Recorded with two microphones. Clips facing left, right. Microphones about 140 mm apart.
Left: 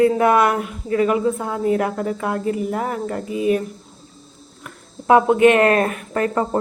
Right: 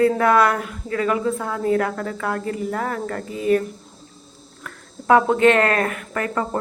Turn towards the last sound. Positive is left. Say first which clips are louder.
# left 4 dB
turn(degrees=25)  # may be behind; listen again after turning